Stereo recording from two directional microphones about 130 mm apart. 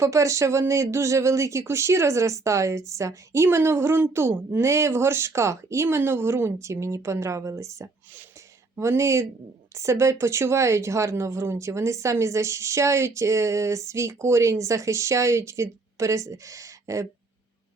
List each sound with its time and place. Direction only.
0.0 s speech: 25° right (ahead or behind)